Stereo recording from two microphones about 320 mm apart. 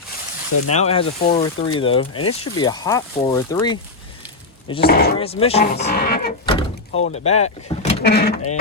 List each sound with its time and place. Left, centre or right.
0.7 s speech: centre
2.1 s speech: left
2.6 s speech: centre
4.8 s speech: left
5.1 s speech: centre
6.4 s speech: centre